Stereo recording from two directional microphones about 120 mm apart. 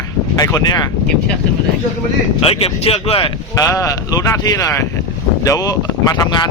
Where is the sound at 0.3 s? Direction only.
30° left (ahead or behind).